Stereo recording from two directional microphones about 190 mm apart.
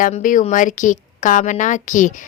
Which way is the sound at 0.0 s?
45° left (ahead or behind).